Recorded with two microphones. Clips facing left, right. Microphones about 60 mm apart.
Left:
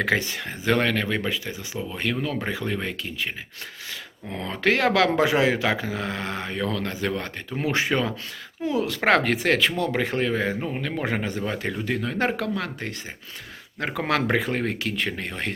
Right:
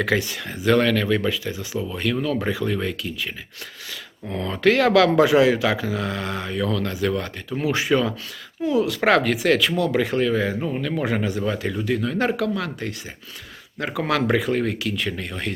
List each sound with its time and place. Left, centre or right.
0.0 s speech: left
4.3 s speech: left